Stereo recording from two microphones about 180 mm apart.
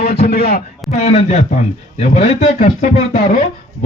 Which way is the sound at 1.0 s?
35° left (ahead or behind).